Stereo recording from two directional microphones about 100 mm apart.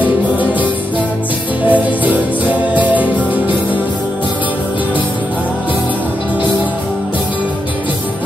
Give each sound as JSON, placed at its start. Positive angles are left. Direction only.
{"t": 0.0, "sound": "music", "side_deg": -15}
{"t": 1.7, "sound": "music", "side_deg": -15}